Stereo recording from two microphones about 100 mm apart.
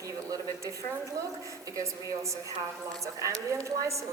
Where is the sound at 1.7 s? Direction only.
30° right (ahead or behind).